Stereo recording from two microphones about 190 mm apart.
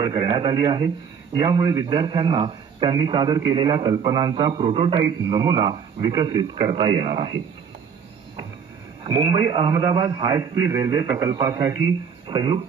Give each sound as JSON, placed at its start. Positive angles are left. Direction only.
{"t": 0.0, "sound": "a man's voice", "side_deg": -25}
{"t": 9.0, "sound": "a man's voice", "side_deg": -25}